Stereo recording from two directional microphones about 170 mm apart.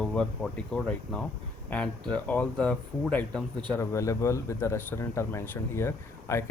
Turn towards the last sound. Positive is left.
turn(degrees=15)  # may be behind; listen again after turning